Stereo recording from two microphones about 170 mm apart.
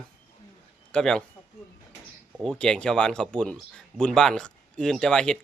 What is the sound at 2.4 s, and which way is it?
Speech, 5° left (ahead or behind).